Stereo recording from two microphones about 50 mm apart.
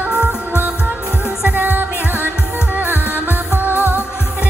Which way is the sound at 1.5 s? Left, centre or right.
Right.